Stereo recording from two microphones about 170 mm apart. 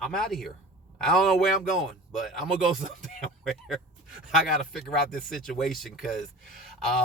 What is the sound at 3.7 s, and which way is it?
Speech, centre (ahead or behind).